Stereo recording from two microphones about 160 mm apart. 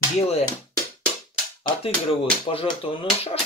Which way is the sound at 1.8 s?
35° left (ahead or behind).